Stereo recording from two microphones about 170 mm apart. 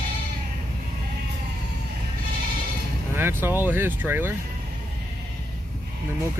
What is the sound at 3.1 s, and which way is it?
Speech, 15° right (ahead or behind).